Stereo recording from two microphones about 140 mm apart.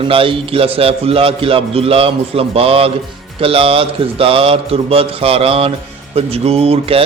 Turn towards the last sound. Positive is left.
turn(degrees=-45)  # may be behind; listen again after turning